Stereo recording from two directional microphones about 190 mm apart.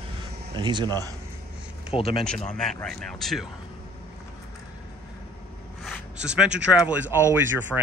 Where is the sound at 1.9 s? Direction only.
25° left (ahead or behind).